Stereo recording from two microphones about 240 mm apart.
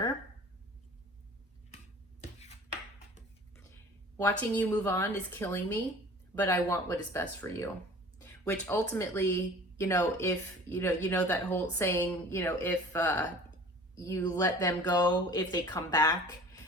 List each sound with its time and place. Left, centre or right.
4.2 s a woman's voice: centre